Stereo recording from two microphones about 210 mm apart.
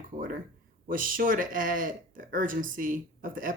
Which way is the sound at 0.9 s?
40° right (ahead or behind).